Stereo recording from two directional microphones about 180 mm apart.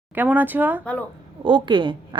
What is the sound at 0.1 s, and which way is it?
Speech, 10° right (ahead or behind).